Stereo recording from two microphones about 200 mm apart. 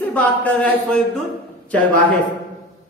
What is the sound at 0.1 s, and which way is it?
Speech, 5° left (ahead or behind).